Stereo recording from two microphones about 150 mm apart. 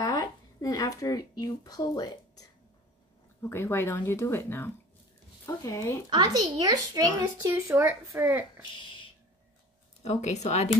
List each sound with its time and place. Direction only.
0.0 s speech: 25° left (ahead or behind)
3.4 s speech: 15° left (ahead or behind)
6.0 s a child's voice: 30° right (ahead or behind)
7.6 s speech: 10° right (ahead or behind)
10.0 s speech: 50° left (ahead or behind)